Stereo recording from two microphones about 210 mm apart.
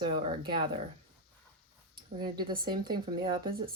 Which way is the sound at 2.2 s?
20° right (ahead or behind).